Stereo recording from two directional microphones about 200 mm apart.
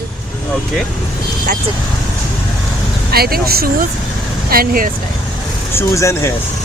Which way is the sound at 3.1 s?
50° right (ahead or behind).